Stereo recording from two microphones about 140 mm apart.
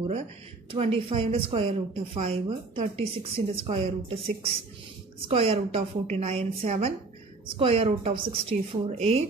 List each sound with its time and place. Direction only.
0.7 s a woman's voice: 40° right (ahead or behind)
3.6 s a woman's voice: 55° right (ahead or behind)